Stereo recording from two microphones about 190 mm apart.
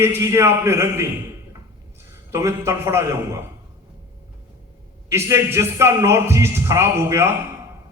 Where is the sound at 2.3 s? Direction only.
15° right (ahead or behind).